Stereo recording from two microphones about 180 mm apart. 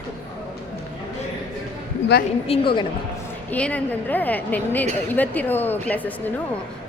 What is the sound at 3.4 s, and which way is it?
A woman's voice, 10° left (ahead or behind).